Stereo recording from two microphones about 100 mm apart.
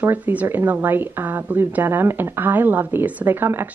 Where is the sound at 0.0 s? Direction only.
15° right (ahead or behind).